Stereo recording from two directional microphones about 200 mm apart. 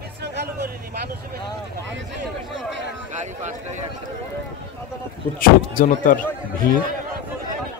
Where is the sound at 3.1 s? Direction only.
35° right (ahead or behind).